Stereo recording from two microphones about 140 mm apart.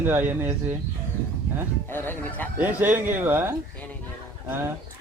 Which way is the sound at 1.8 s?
15° left (ahead or behind).